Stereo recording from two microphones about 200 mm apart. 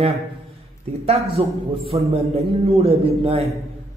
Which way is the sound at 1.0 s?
30° right (ahead or behind).